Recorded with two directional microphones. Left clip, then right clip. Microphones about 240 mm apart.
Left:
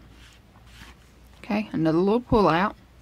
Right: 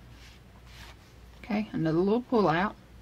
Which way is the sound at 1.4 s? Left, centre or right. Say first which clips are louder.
Left 6 dB; left.